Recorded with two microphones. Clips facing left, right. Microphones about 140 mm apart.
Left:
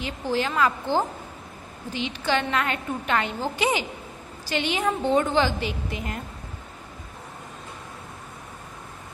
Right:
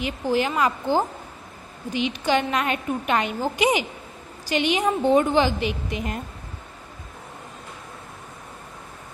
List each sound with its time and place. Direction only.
0.0 s a woman's voice: 15° right (ahead or behind)